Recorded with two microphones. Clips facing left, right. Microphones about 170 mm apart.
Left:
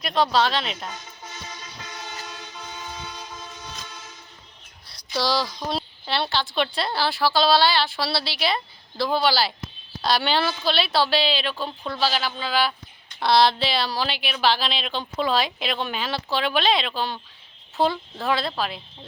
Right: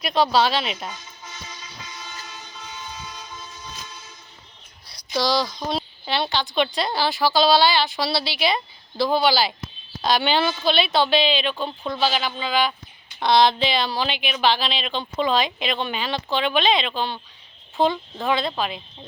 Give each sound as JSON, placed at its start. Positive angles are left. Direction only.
{"t": 0.0, "sound": "a woman's voice", "side_deg": -5}
{"t": 1.9, "sound": "train", "side_deg": 65}
{"t": 5.2, "sound": "a woman's voice", "side_deg": 5}
{"t": 5.6, "sound": "a sound", "side_deg": 0}
{"t": 6.5, "sound": "a woman's voice", "side_deg": 0}